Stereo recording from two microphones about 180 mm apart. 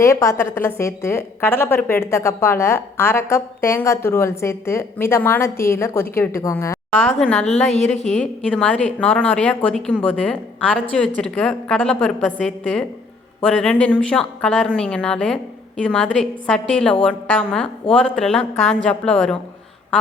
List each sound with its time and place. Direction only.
0.0 s a woman's voice: 15° left (ahead or behind)
7.4 s a woman's voice: 40° left (ahead or behind)
8.1 s a woman's voice: 5° left (ahead or behind)